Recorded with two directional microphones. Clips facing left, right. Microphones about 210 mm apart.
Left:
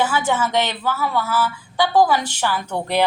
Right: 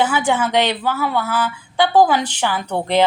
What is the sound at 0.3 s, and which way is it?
A woman's voice, 15° right (ahead or behind).